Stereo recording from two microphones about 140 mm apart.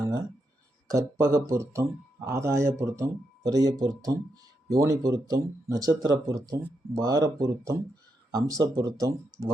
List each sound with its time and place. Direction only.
0.9 s a man's voice: 25° right (ahead or behind)